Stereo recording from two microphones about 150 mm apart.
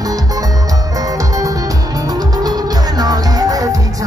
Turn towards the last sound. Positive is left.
turn(degrees=-25)  # may be behind; listen again after turning